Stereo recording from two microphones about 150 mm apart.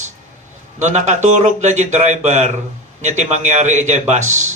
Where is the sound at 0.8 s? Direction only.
50° right (ahead or behind).